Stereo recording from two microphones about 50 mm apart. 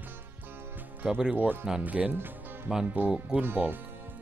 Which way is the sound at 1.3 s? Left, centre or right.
Right.